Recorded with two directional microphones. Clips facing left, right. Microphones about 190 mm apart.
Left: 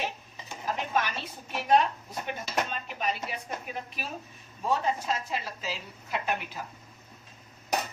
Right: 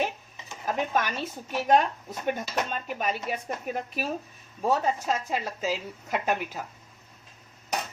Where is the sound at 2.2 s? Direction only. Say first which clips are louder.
Right 4 dB; 45° right (ahead or behind).